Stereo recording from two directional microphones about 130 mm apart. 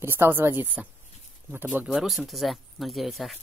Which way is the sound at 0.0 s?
15° right (ahead or behind).